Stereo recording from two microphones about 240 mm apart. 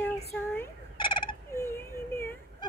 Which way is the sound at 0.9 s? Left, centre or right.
Left.